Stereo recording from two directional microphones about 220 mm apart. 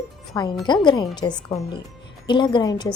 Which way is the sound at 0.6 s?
20° left (ahead or behind).